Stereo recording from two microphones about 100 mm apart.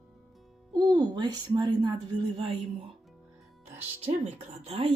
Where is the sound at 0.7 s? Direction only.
45° right (ahead or behind); by 2.9 s 60° right (ahead or behind).